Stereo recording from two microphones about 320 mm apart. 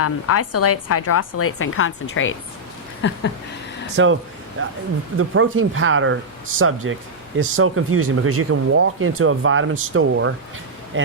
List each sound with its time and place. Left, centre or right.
0.0 s a woman's voice: left
3.0 s a sound: left
3.9 s speech: right